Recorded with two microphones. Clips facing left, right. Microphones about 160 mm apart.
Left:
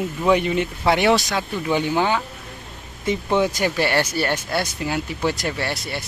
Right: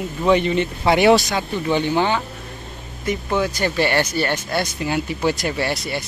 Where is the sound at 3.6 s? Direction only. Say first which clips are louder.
Right 1 dB; 5° left (ahead or behind).